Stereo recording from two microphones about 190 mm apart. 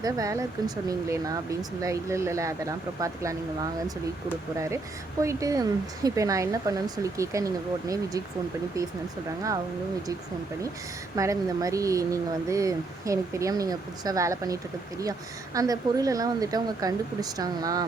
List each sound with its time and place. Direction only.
0.0 s speech: 20° right (ahead or behind)
5.2 s speech: 15° right (ahead or behind)
11.1 s speech: 15° right (ahead or behind)